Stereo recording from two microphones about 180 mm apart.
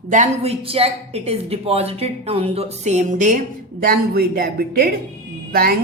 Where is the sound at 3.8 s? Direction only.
55° right (ahead or behind).